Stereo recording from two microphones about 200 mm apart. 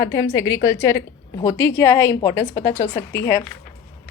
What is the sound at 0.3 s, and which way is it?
Speech, 75° left (ahead or behind).